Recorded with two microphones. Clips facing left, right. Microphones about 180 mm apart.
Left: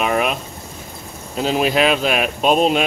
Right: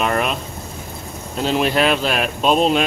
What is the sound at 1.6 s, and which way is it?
Speech, 5° left (ahead or behind).